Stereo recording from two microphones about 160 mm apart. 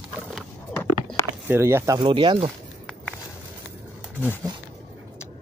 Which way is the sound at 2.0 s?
30° right (ahead or behind).